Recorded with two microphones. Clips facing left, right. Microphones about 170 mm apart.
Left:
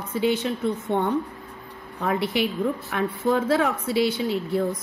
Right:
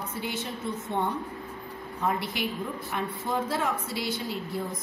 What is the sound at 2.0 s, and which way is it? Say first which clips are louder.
Speech: left 6 dB; 70° left (ahead or behind).